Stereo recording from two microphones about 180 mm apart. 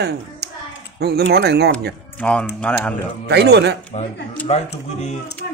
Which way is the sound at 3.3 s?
70° right (ahead or behind).